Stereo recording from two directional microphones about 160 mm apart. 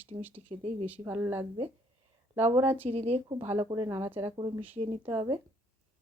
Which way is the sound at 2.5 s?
20° right (ahead or behind).